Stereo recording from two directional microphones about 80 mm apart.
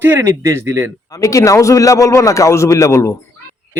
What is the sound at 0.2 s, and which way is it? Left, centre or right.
Speech, right.